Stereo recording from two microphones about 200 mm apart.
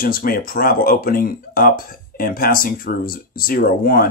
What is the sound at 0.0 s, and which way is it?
Speech, 45° left (ahead or behind).